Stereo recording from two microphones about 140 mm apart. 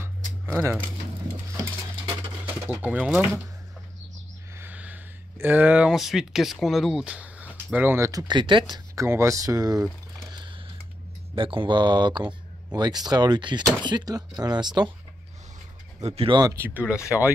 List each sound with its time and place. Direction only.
0.0 s a sound: 20° right (ahead or behind)
2.4 s speech: 10° right (ahead or behind)
4.6 s speech: 10° right (ahead or behind)
11.3 s speech: 35° right (ahead or behind)
16.0 s speech: 45° right (ahead or behind)
16.3 s speech: 20° right (ahead or behind)